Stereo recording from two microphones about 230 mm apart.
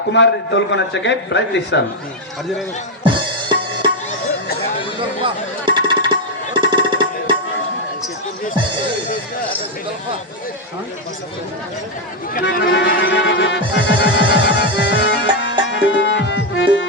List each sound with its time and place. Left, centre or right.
0.1 s music: left
3.0 s music: right
5.2 s a sound: centre
6.5 s music: right
12.3 s music: left